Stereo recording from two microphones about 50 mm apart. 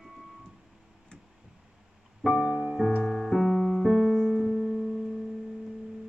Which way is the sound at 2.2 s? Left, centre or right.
Centre.